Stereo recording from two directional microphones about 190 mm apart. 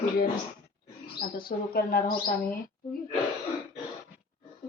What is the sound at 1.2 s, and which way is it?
Speech, 50° left (ahead or behind).